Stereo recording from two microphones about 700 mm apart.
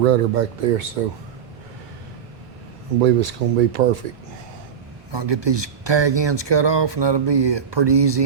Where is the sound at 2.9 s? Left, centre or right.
Right.